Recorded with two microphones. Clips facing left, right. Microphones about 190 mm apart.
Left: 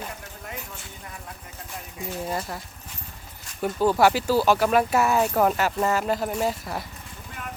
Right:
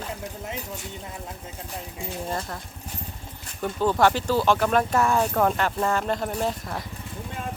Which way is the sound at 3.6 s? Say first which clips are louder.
Left 1 dB; 10° left (ahead or behind).